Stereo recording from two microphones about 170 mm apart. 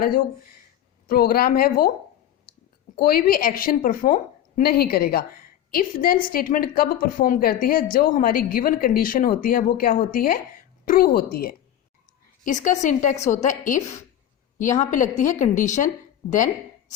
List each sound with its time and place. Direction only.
1.0 s a woman's voice: 60° left (ahead or behind)
3.0 s a woman's voice: 60° left (ahead or behind)
12.5 s a woman's voice: 45° left (ahead or behind)